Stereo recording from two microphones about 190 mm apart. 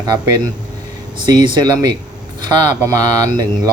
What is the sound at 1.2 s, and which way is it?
Speech, 20° right (ahead or behind).